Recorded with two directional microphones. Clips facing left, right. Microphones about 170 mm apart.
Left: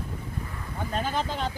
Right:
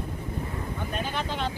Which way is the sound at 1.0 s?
40° left (ahead or behind).